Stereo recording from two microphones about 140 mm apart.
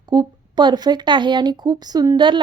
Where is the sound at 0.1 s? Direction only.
30° right (ahead or behind).